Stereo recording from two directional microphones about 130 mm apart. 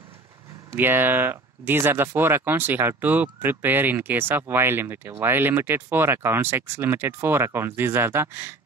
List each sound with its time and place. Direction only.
0.7 s speech: 15° right (ahead or behind)